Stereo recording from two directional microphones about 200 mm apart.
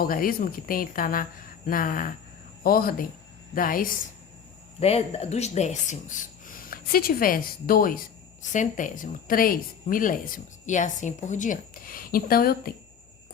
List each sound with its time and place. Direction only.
0.0 s speech: 45° left (ahead or behind)
4.8 s speech: 30° left (ahead or behind); by 12.7 s 50° left (ahead or behind)